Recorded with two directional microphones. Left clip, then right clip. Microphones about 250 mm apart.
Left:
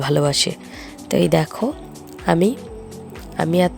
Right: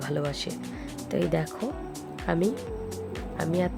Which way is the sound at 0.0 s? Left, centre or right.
Left.